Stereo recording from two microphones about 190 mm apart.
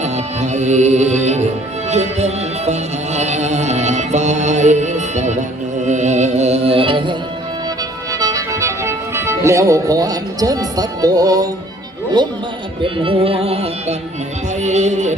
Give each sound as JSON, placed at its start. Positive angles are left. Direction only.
{"t": 0.0, "sound": "music", "side_deg": -40}
{"t": 8.2, "sound": "music", "side_deg": -15}
{"t": 12.2, "sound": "speech", "side_deg": -25}
{"t": 12.8, "sound": "music", "side_deg": -30}